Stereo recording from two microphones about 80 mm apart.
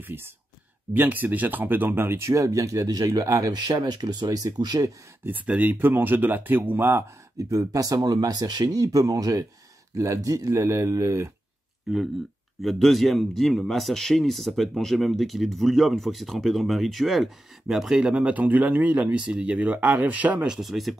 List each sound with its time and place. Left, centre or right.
0.0 s speech: right
3.7 s speech: right
5.2 s speech: right
7.3 s speech: right
11.9 s speech: centre
20.4 s speech: centre